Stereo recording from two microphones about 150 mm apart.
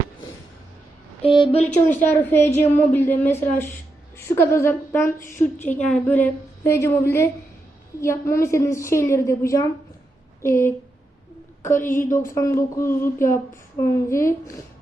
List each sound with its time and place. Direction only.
1.2 s speech: 35° left (ahead or behind)
1.9 s a woman's voice: 15° left (ahead or behind)